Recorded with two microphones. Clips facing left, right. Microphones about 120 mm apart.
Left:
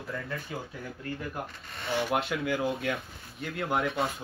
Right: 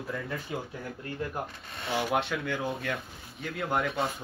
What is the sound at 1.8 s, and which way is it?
Speech, centre (ahead or behind).